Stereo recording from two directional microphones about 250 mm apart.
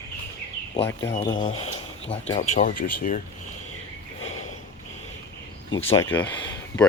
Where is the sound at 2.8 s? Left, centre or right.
Left.